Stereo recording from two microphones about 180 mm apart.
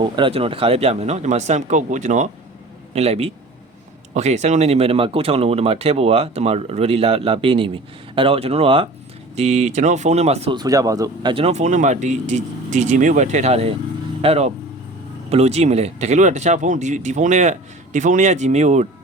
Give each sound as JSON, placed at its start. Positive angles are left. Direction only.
{"t": 0.2, "sound": "speech", "side_deg": -30}
{"t": 10.6, "sound": "speech", "side_deg": -20}